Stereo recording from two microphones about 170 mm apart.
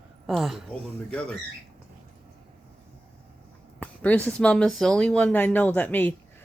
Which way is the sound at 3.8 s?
10° left (ahead or behind).